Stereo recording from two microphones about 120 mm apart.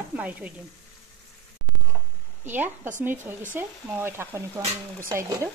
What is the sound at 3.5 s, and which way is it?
Speech, 20° right (ahead or behind).